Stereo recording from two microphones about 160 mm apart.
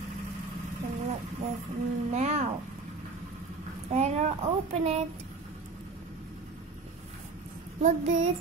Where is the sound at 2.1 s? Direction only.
45° right (ahead or behind).